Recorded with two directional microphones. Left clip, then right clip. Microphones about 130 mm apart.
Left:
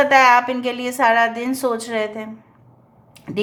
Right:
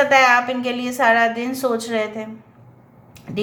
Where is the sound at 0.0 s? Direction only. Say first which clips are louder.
Left 1 dB; 35° left (ahead or behind).